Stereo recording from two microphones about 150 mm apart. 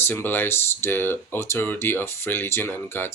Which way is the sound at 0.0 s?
15° left (ahead or behind).